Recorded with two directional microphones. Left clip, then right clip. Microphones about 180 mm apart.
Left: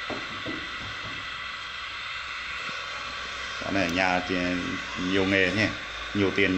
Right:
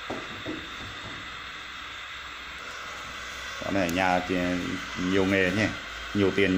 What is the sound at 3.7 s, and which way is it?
Speech, 15° right (ahead or behind).